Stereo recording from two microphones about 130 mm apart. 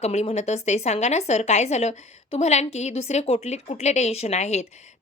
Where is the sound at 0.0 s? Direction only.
60° left (ahead or behind).